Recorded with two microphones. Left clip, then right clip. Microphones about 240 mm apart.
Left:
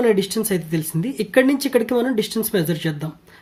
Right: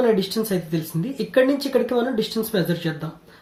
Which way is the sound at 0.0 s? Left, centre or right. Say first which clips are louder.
Left 2 dB; left.